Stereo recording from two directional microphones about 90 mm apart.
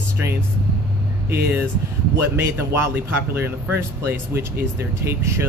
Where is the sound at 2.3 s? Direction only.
25° right (ahead or behind).